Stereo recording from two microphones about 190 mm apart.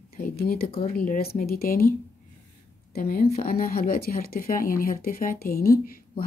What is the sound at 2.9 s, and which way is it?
Speech, 50° left (ahead or behind).